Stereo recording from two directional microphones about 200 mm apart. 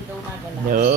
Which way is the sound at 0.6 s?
45° right (ahead or behind).